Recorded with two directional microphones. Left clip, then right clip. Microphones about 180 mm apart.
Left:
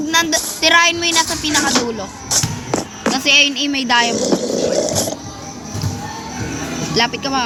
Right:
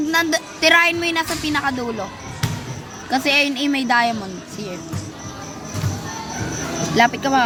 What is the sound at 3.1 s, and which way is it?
A woman's voice, 20° right (ahead or behind).